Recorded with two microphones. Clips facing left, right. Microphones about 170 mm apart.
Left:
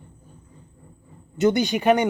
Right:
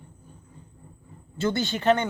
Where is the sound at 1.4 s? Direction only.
15° left (ahead or behind).